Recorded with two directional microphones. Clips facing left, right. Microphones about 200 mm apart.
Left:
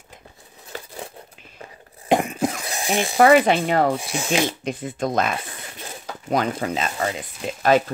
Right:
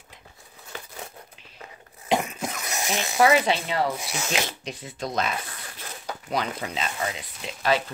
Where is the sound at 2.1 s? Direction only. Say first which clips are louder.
Left 5 dB; 50° left (ahead or behind).